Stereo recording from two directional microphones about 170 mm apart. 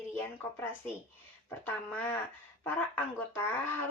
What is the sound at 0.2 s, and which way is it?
A woman's voice, 10° left (ahead or behind).